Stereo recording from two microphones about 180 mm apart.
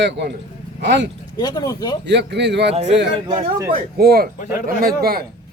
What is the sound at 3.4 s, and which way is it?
Speech, 20° right (ahead or behind).